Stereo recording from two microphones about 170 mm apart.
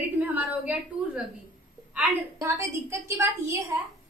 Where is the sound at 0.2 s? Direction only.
10° right (ahead or behind).